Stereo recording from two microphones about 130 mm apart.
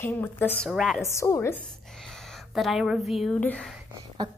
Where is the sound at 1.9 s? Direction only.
5° left (ahead or behind).